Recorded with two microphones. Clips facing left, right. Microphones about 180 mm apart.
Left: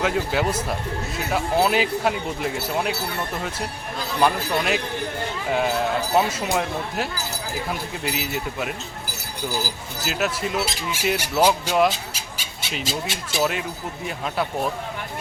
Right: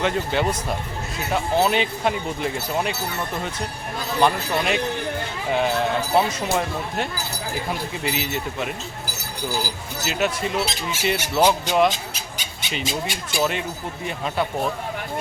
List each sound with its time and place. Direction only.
0.0 s speech: 5° left (ahead or behind)
4.2 s speech: centre (ahead or behind)
10.0 s speech: centre (ahead or behind)